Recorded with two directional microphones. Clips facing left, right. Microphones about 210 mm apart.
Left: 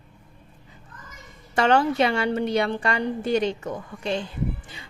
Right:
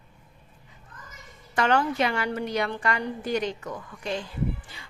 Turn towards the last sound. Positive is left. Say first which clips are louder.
# left 1 dB
turn(degrees=25)  # may be behind; listen again after turning